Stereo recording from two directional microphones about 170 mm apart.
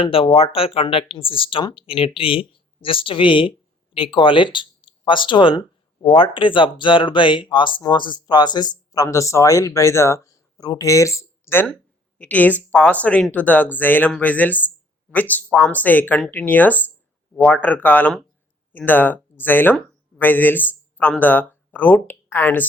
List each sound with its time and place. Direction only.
0.0 s speech: 30° left (ahead or behind); by 22.6 s 10° left (ahead or behind)